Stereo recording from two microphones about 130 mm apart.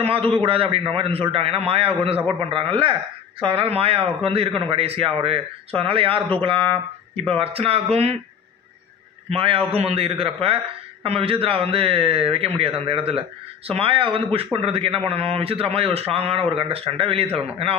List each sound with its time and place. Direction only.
0.0 s a man's voice: 45° right (ahead or behind)
9.3 s a man's voice: 45° right (ahead or behind)